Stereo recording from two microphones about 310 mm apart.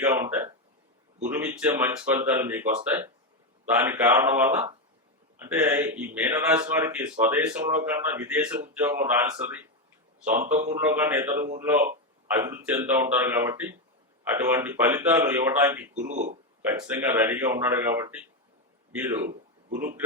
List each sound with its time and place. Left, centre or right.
0.0 s a sound: centre
1.2 s speech: centre
16.0 s speech: right
16.8 s speech: centre
19.8 s speech: centre